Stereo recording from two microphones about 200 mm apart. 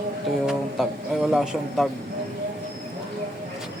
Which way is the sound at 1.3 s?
5° right (ahead or behind).